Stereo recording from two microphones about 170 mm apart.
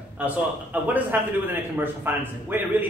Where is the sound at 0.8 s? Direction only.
10° right (ahead or behind).